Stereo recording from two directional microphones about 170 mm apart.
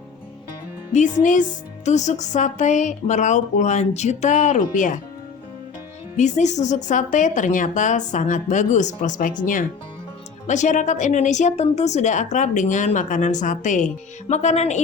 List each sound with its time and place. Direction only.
1.2 s a woman's voice: 50° left (ahead or behind)
6.1 s a woman's voice: 45° left (ahead or behind)